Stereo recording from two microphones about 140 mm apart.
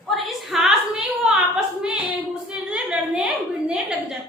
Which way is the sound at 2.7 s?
5° right (ahead or behind).